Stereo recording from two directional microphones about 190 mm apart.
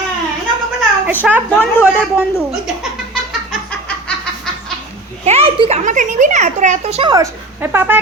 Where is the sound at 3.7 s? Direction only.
5° left (ahead or behind).